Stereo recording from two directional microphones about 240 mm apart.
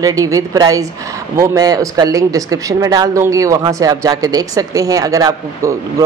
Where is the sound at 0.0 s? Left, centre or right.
Centre.